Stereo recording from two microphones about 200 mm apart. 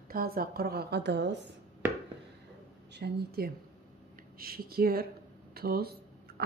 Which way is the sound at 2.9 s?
55° right (ahead or behind).